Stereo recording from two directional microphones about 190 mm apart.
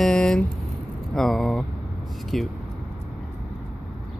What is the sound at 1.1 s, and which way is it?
Speech, centre (ahead or behind).